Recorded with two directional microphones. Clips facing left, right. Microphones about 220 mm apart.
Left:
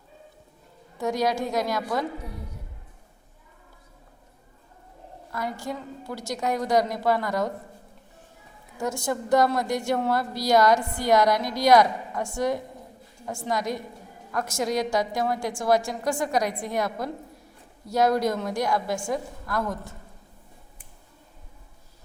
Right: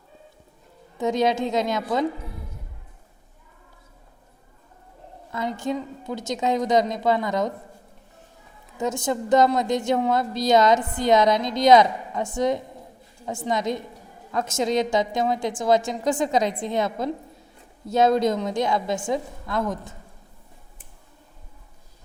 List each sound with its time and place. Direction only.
0.9 s a woman's voice: 20° right (ahead or behind)
5.3 s a woman's voice: 20° right (ahead or behind)
8.8 s a woman's voice: 20° right (ahead or behind)